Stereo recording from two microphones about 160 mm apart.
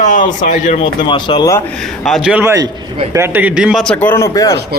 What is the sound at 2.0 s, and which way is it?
A man's voice, centre (ahead or behind).